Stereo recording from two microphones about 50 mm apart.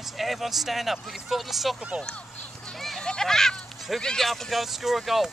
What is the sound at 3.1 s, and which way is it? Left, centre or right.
Speech, centre.